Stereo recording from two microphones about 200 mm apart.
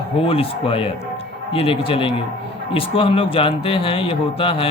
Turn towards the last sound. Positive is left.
turn(degrees=25)  # may be behind; listen again after turning